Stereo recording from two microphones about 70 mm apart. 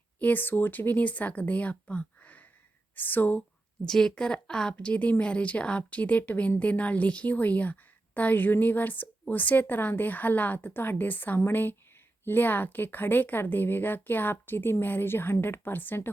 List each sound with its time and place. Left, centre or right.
0.2 s a woman's voice: left
3.8 s a woman's voice: centre; by 16.0 s left